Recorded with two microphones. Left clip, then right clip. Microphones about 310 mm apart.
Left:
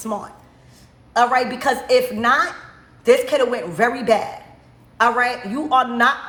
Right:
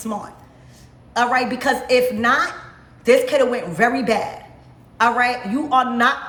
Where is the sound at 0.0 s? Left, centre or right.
Centre.